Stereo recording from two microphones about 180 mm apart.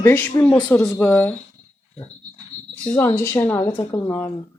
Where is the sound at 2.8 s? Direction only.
10° left (ahead or behind).